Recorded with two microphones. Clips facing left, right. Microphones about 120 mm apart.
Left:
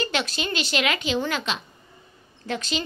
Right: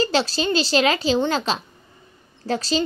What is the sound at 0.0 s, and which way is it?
A woman's voice, 30° right (ahead or behind).